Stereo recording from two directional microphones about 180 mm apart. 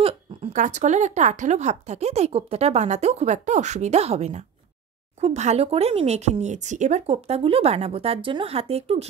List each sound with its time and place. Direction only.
0.0 s speech: 35° right (ahead or behind)